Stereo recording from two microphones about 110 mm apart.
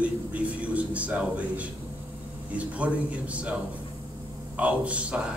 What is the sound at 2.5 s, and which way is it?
A man's voice, 10° right (ahead or behind).